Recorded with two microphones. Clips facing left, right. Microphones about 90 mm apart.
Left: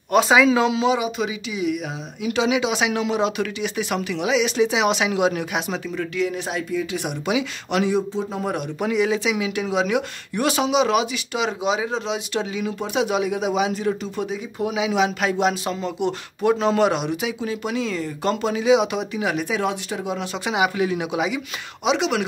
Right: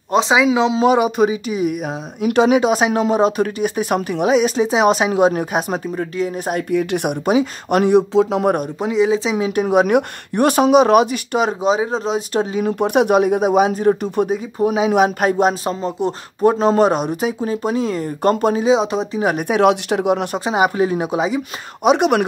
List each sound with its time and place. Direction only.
0.1 s speech: 20° right (ahead or behind)
0.8 s speech: 55° right (ahead or behind)
6.7 s speech: 60° right (ahead or behind)
7.2 s speech: 45° right (ahead or behind)
8.1 s speech: 85° right
8.7 s speech: 25° right (ahead or behind)
9.5 s speech: 50° right (ahead or behind)
12.7 s speech: 55° right (ahead or behind)
14.6 s speech: 40° right (ahead or behind)
19.3 s speech: 55° right (ahead or behind)
20.4 s speech: 40° right (ahead or behind)
21.8 s speech: 50° right (ahead or behind)